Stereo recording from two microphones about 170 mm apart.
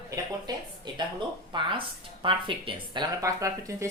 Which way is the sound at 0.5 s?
25° right (ahead or behind).